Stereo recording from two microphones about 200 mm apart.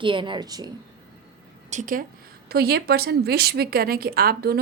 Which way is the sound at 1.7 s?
40° right (ahead or behind).